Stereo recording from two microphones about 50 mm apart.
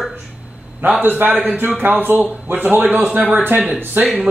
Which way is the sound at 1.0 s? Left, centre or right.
Right.